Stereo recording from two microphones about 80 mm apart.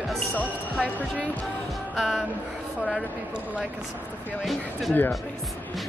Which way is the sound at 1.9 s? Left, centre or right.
Centre.